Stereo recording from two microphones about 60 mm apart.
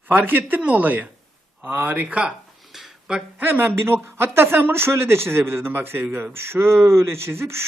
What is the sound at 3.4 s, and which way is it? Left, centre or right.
Speech, right.